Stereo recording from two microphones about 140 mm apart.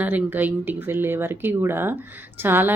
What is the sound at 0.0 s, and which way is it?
Speech, 10° right (ahead or behind).